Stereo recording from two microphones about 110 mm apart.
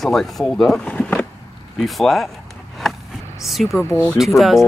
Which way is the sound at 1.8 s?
Centre (ahead or behind).